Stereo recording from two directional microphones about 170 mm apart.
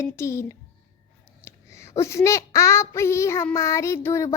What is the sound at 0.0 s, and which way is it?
Child singing, 15° left (ahead or behind).